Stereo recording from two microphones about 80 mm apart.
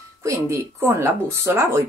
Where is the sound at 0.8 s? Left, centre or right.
Right.